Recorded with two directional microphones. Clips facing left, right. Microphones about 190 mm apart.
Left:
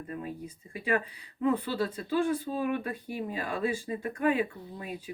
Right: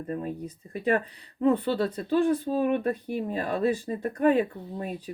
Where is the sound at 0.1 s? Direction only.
40° right (ahead or behind).